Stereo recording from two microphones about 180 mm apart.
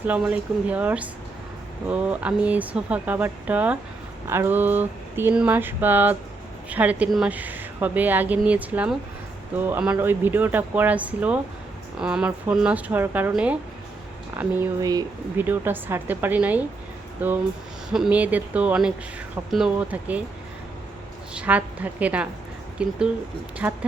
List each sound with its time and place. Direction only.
0.0 s speech: 10° right (ahead or behind)
21.3 s a woman's voice: 5° right (ahead or behind)